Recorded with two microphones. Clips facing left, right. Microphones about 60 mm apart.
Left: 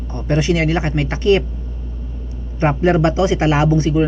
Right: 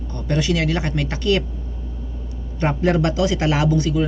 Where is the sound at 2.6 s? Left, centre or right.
Left.